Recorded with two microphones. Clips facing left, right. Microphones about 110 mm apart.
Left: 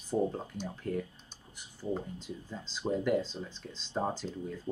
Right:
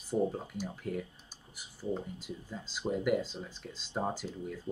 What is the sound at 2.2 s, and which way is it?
Speech, 10° right (ahead or behind).